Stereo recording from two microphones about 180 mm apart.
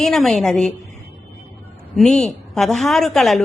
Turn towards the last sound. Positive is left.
turn(degrees=0)  # may be behind; listen again after turning